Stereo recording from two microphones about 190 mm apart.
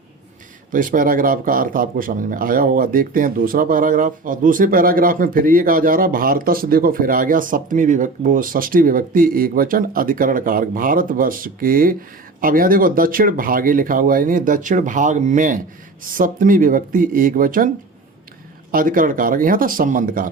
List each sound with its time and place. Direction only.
0.7 s speech: 45° right (ahead or behind)
18.7 s speech: 45° right (ahead or behind)